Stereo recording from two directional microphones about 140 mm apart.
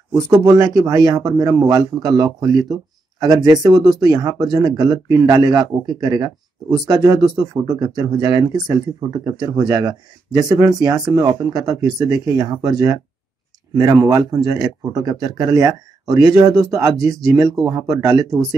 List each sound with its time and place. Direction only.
0.4 s a man's voice: 25° right (ahead or behind)